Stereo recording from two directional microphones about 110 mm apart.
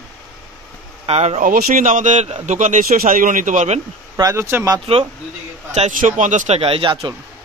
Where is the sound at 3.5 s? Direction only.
90° right.